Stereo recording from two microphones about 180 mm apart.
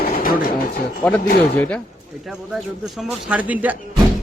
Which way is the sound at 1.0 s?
10° left (ahead or behind).